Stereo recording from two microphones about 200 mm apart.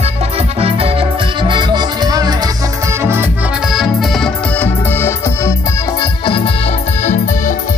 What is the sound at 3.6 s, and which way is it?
Music, centre (ahead or behind).